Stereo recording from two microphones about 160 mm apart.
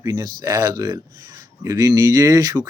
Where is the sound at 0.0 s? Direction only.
25° right (ahead or behind).